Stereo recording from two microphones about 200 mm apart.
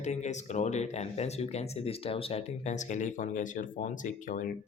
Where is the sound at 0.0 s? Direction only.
35° left (ahead or behind).